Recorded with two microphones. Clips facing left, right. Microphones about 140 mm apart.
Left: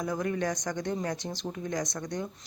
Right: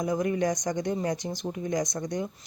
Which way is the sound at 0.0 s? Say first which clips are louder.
Right 4 dB; 15° right (ahead or behind).